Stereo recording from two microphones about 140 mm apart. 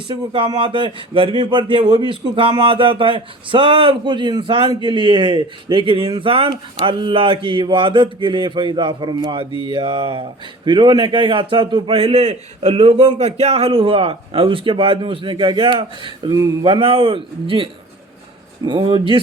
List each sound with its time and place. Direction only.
0.1 s speech: 35° right (ahead or behind)